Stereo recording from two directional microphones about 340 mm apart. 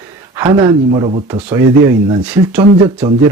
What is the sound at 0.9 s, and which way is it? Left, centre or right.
Speech, centre.